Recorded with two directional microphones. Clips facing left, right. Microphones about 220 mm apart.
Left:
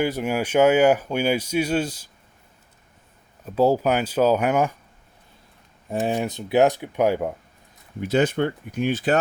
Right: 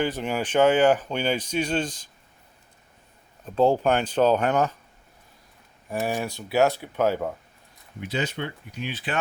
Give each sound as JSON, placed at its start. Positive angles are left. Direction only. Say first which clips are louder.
{"t": 0.0, "sound": "speech", "louder": "left 3 dB", "side_deg": 10}
{"t": 3.4, "sound": "speech", "louder": "left 1 dB", "side_deg": 10}
{"t": 5.9, "sound": "speech", "louder": "left 3 dB", "side_deg": 20}
{"t": 8.0, "sound": "speech", "louder": "left 9 dB", "side_deg": 50}